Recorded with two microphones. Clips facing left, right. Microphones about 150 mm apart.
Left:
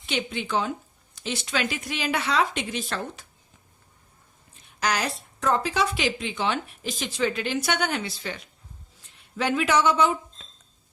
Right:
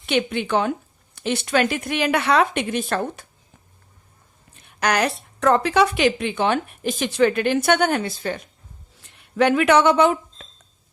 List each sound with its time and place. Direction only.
0.0 s a woman's voice: 60° right (ahead or behind)
4.5 s a woman's voice: 60° right (ahead or behind)
9.3 s a woman's voice: 60° right (ahead or behind)